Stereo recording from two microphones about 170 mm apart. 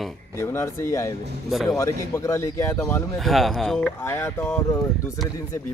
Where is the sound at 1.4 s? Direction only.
Centre (ahead or behind).